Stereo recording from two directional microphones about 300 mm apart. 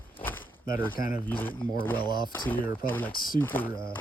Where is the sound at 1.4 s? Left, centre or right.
Centre.